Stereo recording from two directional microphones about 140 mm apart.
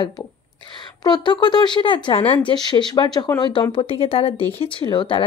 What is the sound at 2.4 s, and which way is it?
Speech, 30° left (ahead or behind).